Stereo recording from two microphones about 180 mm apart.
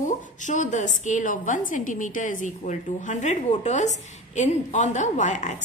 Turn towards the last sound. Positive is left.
turn(degrees=40)  # may be behind; listen again after turning